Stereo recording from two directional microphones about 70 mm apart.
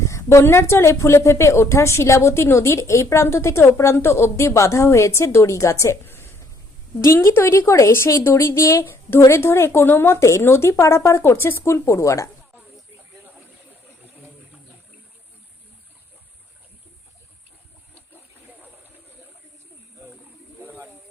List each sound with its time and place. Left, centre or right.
0.0 s a woman's voice: left
7.0 s a woman's voice: left
20.6 s snake: right